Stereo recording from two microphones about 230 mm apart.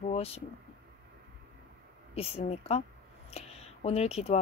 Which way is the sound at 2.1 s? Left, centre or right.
Left.